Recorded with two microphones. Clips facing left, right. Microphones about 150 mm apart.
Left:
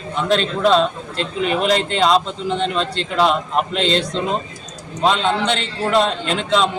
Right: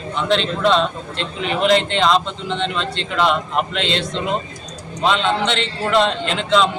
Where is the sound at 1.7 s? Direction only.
40° left (ahead or behind).